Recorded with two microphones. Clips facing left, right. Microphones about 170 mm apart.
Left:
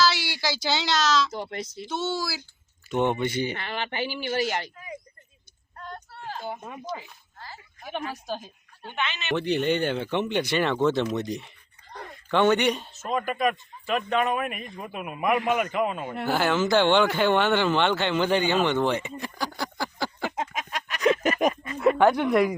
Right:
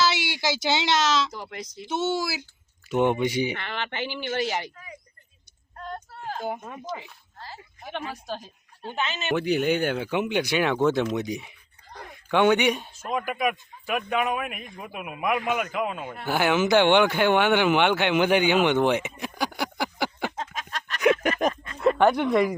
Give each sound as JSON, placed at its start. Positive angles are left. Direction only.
{"t": 0.0, "sound": "speech", "side_deg": -20}
{"t": 1.3, "sound": "speech", "side_deg": 25}
{"t": 1.7, "sound": "speech", "side_deg": -20}
{"t": 2.9, "sound": "speech", "side_deg": -10}
{"t": 5.7, "sound": "a sound", "side_deg": -45}
{"t": 6.9, "sound": "sheep", "side_deg": -25}
{"t": 8.1, "sound": "a man's voice", "side_deg": 0}
{"t": 8.8, "sound": "speech", "side_deg": -35}
{"t": 9.3, "sound": "a man's voice", "side_deg": -5}
{"t": 16.2, "sound": "speech", "side_deg": -15}
{"t": 20.3, "sound": "a sound", "side_deg": 15}